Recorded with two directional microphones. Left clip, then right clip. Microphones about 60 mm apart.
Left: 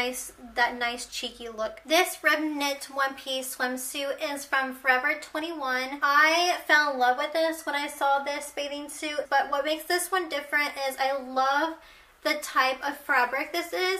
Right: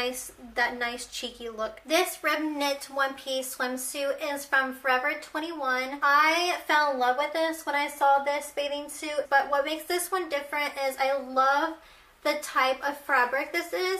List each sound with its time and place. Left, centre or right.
0.0 s a woman's voice: left
13.2 s speech: centre
13.5 s speech: left